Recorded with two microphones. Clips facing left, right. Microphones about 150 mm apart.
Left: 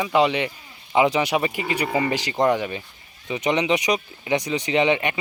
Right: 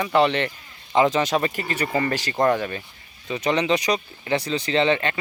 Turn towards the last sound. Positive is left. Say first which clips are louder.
# left 1 dB
turn(degrees=15)  # may be behind; listen again after turning